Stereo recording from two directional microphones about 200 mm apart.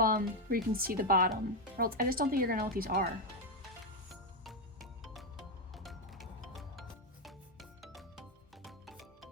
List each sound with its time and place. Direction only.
0.0 s speech: 45° right (ahead or behind)
5.7 s music: centre (ahead or behind)